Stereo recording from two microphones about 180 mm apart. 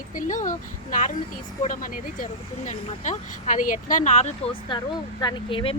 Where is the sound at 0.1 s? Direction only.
45° left (ahead or behind).